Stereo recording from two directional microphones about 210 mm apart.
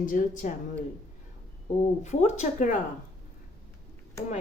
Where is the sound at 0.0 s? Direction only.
40° left (ahead or behind).